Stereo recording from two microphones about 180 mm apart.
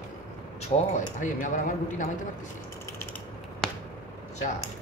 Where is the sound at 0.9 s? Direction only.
45° left (ahead or behind).